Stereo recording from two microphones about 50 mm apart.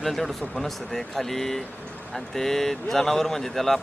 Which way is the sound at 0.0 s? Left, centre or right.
Centre.